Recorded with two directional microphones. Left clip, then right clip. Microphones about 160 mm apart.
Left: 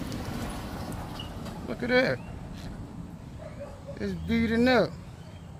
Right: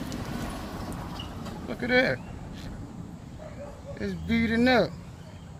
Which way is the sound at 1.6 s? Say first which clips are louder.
Right 1 dB; centre (ahead or behind).